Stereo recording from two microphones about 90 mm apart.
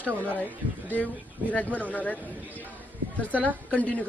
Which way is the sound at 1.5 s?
15° left (ahead or behind).